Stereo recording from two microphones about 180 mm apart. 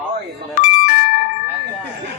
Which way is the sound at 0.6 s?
55° left (ahead or behind).